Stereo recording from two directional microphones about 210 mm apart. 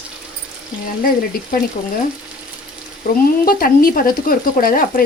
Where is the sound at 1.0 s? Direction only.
45° left (ahead or behind).